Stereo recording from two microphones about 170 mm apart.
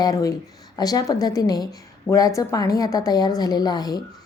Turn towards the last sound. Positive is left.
turn(degrees=25)  # may be behind; listen again after turning